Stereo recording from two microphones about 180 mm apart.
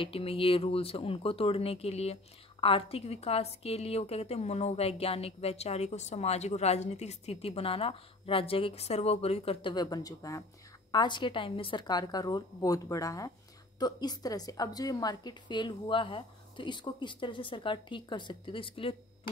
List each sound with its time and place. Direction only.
0.0 s a woman's voice: 30° left (ahead or behind)